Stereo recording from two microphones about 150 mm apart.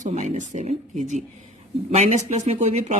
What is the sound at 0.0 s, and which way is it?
A woman's voice, 50° right (ahead or behind).